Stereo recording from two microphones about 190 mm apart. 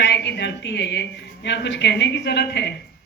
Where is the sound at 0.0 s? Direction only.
65° left (ahead or behind).